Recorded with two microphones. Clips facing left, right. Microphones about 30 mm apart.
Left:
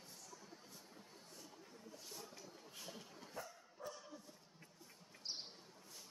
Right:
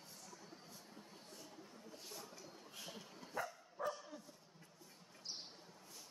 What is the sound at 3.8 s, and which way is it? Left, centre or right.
Bow-wow, right.